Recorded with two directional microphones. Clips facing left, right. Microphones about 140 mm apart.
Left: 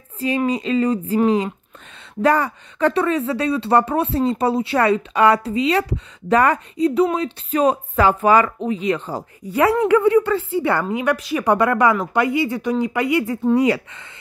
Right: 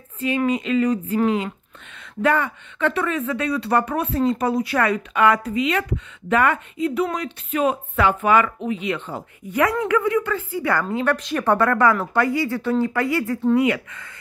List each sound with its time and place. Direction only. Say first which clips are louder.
0.5 s speech: even; 35° left (ahead or behind)
7.5 s speech: left 3 dB; 40° left (ahead or behind); by 13.6 s 20° left (ahead or behind)
13.6 s speech: left 2 dB; 30° left (ahead or behind)